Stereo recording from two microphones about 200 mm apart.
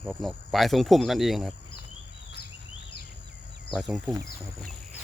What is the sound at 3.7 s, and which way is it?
Speech, centre (ahead or behind).